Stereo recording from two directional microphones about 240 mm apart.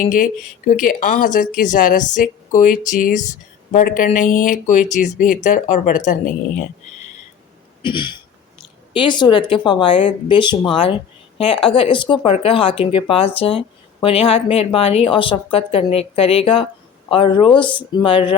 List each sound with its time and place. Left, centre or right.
0.0 s speech: left
7.8 s speech: centre